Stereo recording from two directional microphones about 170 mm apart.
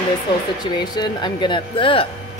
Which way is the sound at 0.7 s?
25° left (ahead or behind).